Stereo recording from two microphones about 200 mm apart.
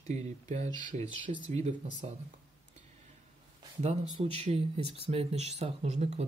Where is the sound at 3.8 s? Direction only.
30° right (ahead or behind).